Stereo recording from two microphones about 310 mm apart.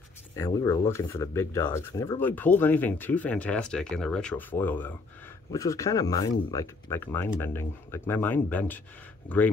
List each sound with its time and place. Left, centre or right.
0.4 s speech: centre